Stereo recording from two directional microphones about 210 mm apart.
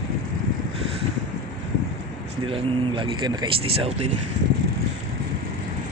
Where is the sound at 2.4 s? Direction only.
25° right (ahead or behind).